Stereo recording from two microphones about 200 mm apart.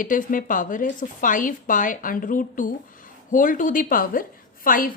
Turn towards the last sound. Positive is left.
turn(degrees=45)  # may be behind; listen again after turning